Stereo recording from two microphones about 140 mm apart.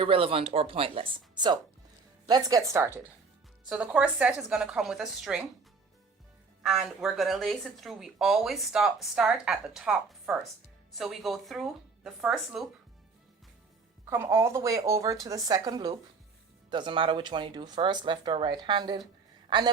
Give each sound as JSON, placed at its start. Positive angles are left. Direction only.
{"t": 0.0, "sound": "speech", "side_deg": -40}
{"t": 6.6, "sound": "speech", "side_deg": -5}
{"t": 14.1, "sound": "a man's voice", "side_deg": -15}